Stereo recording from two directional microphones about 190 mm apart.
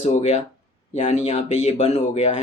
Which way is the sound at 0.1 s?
35° left (ahead or behind).